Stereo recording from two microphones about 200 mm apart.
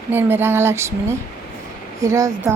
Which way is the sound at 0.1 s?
10° right (ahead or behind).